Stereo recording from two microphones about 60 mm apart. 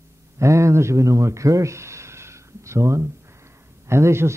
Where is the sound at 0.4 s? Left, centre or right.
Right.